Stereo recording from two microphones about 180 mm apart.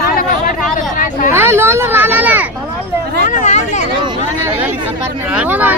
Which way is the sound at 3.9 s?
25° right (ahead or behind).